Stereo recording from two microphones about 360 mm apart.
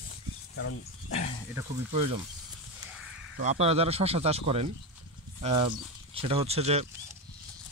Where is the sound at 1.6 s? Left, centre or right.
Centre.